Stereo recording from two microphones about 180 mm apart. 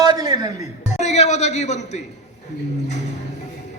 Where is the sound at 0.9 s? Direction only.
40° left (ahead or behind).